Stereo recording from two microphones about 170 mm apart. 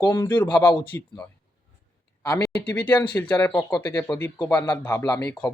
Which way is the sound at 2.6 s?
10° left (ahead or behind).